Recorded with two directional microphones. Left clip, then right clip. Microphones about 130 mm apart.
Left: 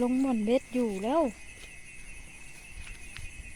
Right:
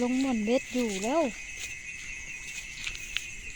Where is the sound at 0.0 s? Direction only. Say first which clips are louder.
Even; 15° left (ahead or behind).